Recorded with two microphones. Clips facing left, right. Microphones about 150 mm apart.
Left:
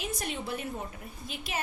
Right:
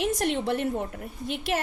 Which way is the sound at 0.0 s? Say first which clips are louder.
Right 10 dB; 75° right (ahead or behind).